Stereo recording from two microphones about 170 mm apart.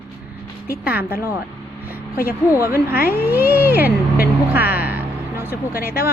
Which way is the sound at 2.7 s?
15° right (ahead or behind).